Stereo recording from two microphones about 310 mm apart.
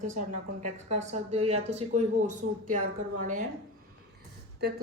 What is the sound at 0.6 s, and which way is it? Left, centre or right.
A woman's voice, right.